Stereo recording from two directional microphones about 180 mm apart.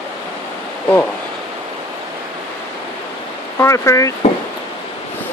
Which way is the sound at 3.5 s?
15° left (ahead or behind).